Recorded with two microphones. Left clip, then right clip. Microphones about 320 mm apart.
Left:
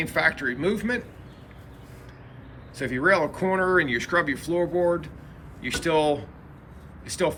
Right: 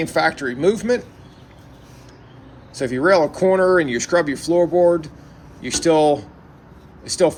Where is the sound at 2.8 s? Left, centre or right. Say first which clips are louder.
Right 6 dB; centre.